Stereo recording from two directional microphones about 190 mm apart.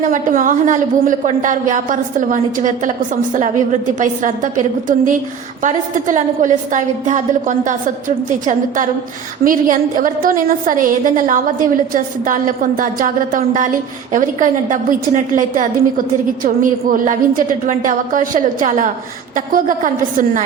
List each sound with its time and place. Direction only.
0.1 s a woman's voice: 45° right (ahead or behind)
16.9 s a woman's voice: 45° right (ahead or behind)